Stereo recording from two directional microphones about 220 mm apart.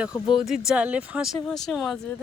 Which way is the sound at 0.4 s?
Centre (ahead or behind).